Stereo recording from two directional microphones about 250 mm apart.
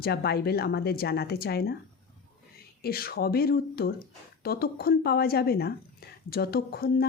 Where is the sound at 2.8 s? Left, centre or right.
Left.